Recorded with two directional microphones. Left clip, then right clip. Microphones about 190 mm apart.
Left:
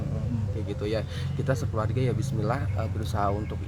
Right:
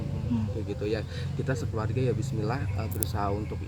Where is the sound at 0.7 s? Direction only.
10° left (ahead or behind).